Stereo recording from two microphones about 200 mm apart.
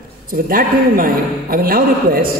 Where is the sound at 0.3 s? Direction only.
45° right (ahead or behind).